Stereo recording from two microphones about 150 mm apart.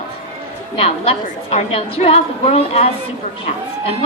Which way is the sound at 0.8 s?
40° left (ahead or behind).